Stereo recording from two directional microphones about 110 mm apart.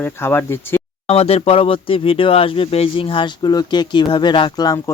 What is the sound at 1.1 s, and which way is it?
Speech, 65° left (ahead or behind).